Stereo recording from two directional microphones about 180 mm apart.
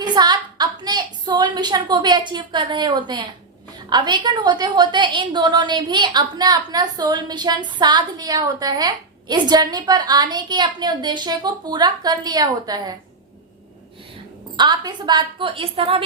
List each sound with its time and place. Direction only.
0.0 s a woman's voice: 25° right (ahead or behind)
14.5 s a woman's voice: 25° right (ahead or behind)